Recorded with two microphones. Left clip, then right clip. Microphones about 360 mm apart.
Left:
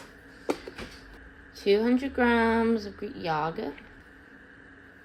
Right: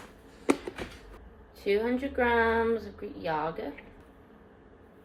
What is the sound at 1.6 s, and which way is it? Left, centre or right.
A woman's voice, left.